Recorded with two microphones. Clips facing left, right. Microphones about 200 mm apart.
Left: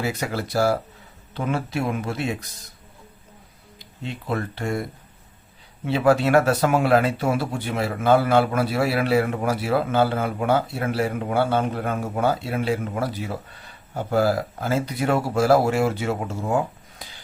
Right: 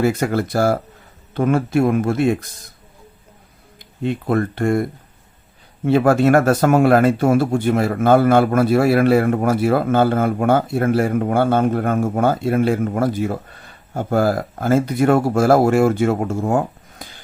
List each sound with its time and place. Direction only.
0.0 s speech: 50° right (ahead or behind)
3.8 s speech: 55° right (ahead or behind)